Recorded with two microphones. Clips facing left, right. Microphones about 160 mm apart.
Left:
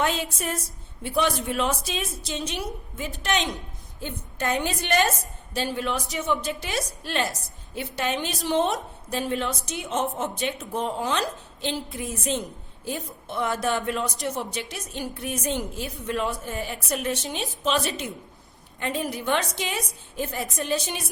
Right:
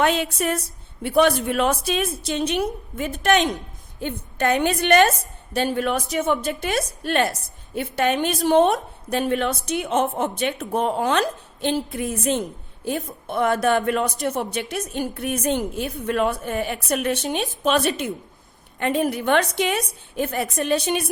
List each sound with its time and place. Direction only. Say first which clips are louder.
0.0 s a woman's voice: right 6 dB; 65° right (ahead or behind)
4.0 s a woman's voice: right 6 dB; 65° right (ahead or behind)